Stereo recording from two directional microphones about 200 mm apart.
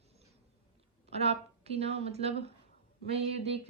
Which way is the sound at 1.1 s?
30° right (ahead or behind).